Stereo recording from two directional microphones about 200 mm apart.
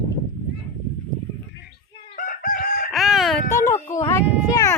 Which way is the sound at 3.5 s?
15° left (ahead or behind).